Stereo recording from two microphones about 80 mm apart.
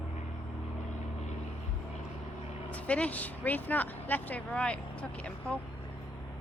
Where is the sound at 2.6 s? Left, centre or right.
Centre.